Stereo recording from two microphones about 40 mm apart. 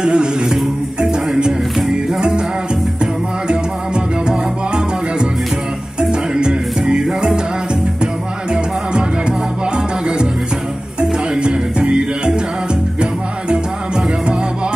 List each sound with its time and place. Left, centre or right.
0.0 s music: right